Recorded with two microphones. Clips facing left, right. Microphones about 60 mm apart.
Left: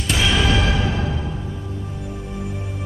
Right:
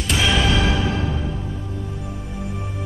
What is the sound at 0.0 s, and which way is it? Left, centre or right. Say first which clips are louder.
Music: even; centre.